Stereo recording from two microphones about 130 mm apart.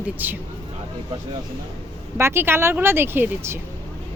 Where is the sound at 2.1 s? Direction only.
20° right (ahead or behind).